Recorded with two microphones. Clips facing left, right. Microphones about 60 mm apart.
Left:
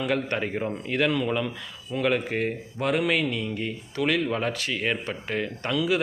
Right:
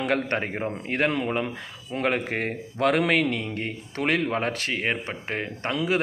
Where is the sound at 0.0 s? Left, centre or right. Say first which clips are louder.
Right 1 dB; right.